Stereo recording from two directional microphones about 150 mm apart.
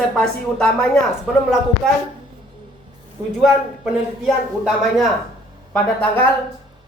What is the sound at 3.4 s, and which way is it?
Speech, centre (ahead or behind).